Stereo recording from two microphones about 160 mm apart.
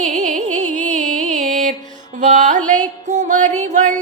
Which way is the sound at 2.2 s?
50° right (ahead or behind).